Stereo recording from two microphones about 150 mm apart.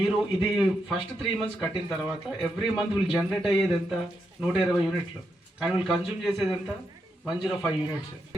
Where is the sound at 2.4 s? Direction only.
Centre (ahead or behind).